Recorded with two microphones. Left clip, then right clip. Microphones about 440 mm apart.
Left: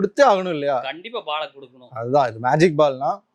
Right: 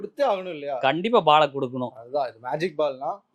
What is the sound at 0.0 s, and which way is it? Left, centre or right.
Speech, left.